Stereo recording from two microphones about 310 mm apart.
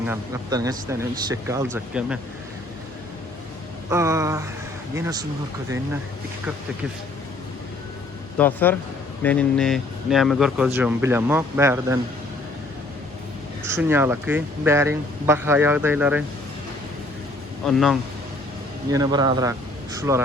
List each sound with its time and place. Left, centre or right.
0.0 s speech: centre
3.8 s speech: centre
8.4 s speech: centre
13.7 s speech: centre
17.7 s speech: centre
18.9 s speech: centre